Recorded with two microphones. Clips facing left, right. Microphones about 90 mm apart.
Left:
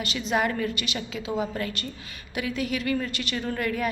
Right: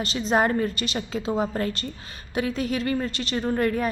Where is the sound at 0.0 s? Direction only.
35° right (ahead or behind).